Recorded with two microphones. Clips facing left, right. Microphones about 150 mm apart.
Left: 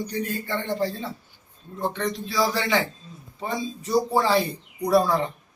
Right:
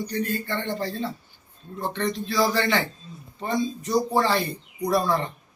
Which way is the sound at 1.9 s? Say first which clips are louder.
Right 3 dB; 5° left (ahead or behind).